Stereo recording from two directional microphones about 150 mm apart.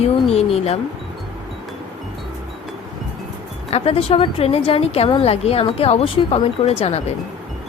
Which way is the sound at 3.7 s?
40° left (ahead or behind).